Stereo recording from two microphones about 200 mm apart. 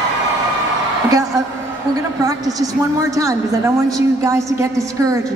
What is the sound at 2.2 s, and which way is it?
Mantra, 15° right (ahead or behind).